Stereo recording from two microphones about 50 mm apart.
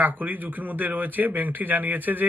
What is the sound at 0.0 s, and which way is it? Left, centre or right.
Speech, right.